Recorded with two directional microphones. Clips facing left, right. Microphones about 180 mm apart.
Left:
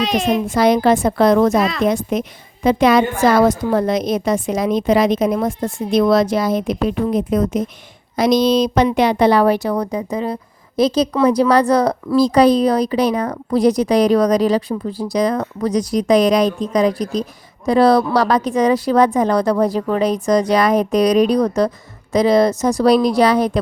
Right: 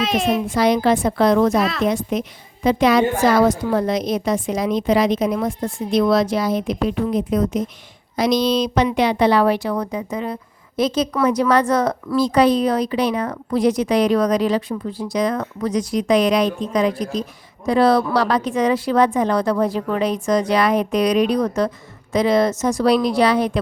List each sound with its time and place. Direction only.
0.0 s a child's voice: centre (ahead or behind)
0.4 s a woman's voice: 45° left (ahead or behind)